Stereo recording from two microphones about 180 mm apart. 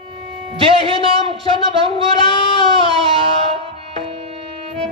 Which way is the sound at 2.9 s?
30° right (ahead or behind).